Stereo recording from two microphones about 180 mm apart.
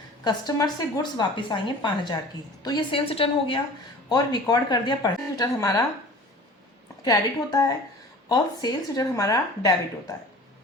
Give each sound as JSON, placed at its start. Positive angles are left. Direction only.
{"t": 0.3, "sound": "a woman's voice", "side_deg": 20}
{"t": 7.0, "sound": "a woman's voice", "side_deg": 20}